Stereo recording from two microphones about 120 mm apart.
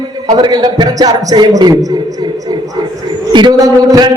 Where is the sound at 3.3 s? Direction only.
35° right (ahead or behind).